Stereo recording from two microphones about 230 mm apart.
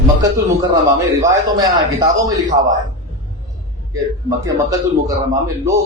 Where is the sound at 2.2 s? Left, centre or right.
Centre.